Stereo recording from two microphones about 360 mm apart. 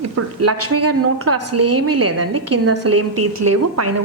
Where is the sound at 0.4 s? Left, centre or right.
Right.